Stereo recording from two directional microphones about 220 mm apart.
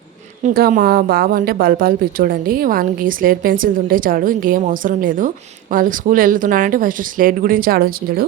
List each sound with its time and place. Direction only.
0.4 s speech: 40° right (ahead or behind)